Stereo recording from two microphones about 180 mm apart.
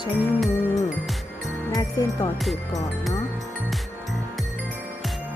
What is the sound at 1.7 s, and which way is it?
Speech, 20° left (ahead or behind).